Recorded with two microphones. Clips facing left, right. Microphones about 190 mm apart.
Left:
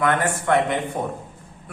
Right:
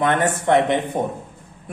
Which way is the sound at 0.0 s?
20° right (ahead or behind).